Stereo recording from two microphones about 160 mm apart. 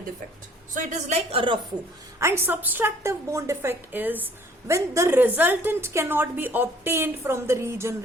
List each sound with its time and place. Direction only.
0.7 s a woman's voice: 55° right (ahead or behind); by 1.5 s 35° right (ahead or behind)
2.1 s a woman's voice: 15° right (ahead or behind)